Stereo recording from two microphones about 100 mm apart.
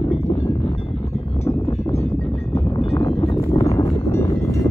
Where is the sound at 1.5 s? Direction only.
45° left (ahead or behind).